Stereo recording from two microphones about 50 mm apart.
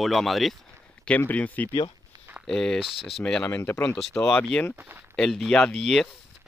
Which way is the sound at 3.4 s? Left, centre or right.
Left.